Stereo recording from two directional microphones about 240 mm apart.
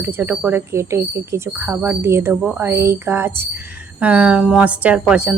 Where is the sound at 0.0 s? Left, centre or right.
Centre.